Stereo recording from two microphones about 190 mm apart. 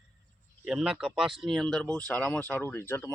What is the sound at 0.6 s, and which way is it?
Speech, 5° right (ahead or behind).